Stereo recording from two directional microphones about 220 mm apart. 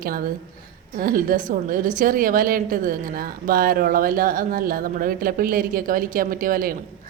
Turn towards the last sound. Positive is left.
turn(degrees=-40)  # may be behind; listen again after turning